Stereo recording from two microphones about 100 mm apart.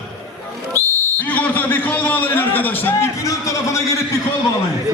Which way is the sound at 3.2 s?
30° left (ahead or behind).